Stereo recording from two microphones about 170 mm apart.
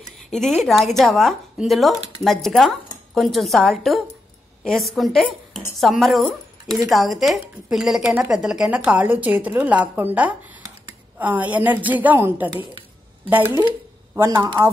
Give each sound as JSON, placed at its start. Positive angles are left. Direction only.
{"t": 0.0, "sound": "a sound", "side_deg": 5}
{"t": 0.7, "sound": "a woman's voice", "side_deg": 0}
{"t": 14.1, "sound": "a woman's voice", "side_deg": -15}